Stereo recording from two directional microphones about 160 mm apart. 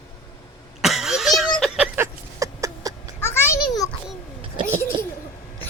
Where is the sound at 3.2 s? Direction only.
15° left (ahead or behind).